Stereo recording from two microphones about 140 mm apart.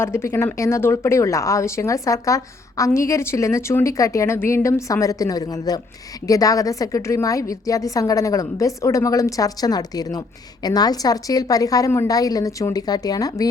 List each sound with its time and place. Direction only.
0.0 s a woman's voice: 20° left (ahead or behind)